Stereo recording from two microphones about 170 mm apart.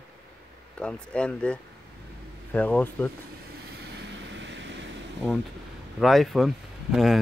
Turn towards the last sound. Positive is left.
turn(degrees=0)  # may be behind; listen again after turning